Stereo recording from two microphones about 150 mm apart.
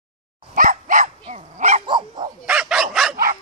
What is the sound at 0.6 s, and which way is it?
Dog, 60° right (ahead or behind).